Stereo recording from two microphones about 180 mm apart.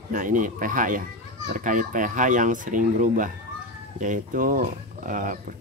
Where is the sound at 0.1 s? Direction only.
45° right (ahead or behind).